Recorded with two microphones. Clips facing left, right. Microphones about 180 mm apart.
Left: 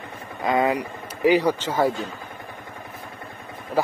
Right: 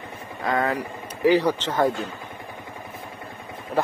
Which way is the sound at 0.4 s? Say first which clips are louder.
Left 3 dB; 15° left (ahead or behind).